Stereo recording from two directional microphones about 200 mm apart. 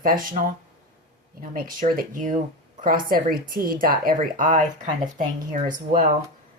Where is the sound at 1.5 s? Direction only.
45° right (ahead or behind).